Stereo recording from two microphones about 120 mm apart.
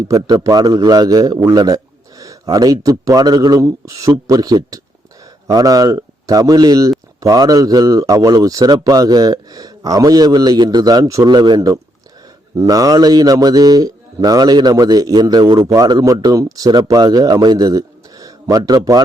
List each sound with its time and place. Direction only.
0.1 s a man's voice: 30° right (ahead or behind)